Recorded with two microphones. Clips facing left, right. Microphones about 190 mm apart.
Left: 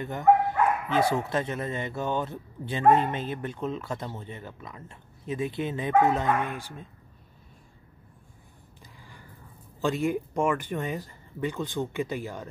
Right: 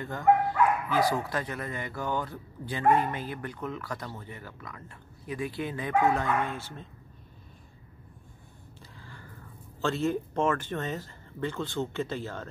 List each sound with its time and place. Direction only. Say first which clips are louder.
0.0 s speech: left 2 dB; 20° left (ahead or behind)
9.8 s speech: left 2 dB; 15° left (ahead or behind)